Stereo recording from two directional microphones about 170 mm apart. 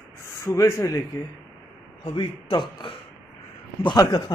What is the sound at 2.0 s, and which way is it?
A man's voice, 30° left (ahead or behind).